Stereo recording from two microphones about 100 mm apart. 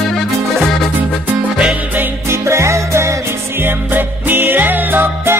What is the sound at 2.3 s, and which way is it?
Music, 30° right (ahead or behind).